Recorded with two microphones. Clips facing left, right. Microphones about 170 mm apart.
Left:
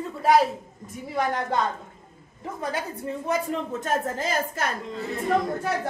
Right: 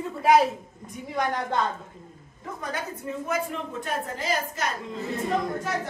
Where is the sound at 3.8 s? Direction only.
45° left (ahead or behind).